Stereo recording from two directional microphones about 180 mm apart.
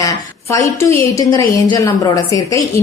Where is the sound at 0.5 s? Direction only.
15° left (ahead or behind).